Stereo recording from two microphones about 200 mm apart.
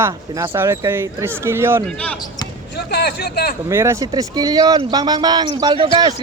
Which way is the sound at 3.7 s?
15° right (ahead or behind).